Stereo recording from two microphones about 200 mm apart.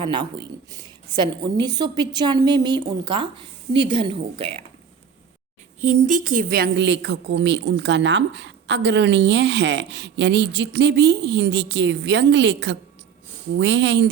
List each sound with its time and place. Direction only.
0.0 s a woman's voice: 25° right (ahead or behind)
5.8 s a woman's voice: 40° right (ahead or behind); by 14.1 s 60° right (ahead or behind)